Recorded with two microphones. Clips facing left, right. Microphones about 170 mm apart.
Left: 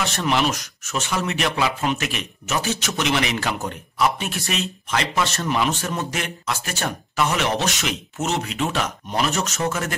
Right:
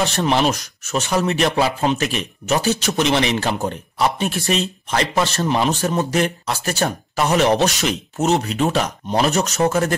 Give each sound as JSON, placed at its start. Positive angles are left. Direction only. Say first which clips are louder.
{"t": 0.0, "sound": "a man's voice", "louder": "right 4 dB", "side_deg": -35}